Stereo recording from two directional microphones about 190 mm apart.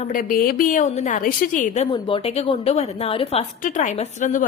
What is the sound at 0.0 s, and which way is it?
A woman's voice, 45° left (ahead or behind).